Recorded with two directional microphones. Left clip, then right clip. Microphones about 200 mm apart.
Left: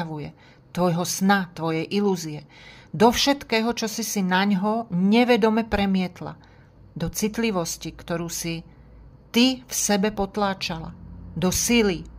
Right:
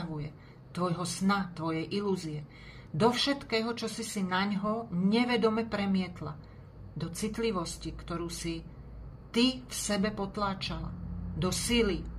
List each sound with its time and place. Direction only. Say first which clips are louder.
0.0 s speech: left 8 dB; 45° left (ahead or behind)